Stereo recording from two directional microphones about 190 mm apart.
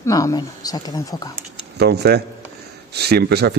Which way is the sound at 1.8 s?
55° right (ahead or behind).